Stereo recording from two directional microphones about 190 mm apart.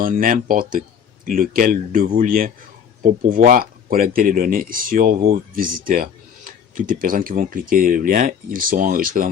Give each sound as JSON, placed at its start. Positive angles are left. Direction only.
{"t": 0.0, "sound": "speech", "side_deg": -45}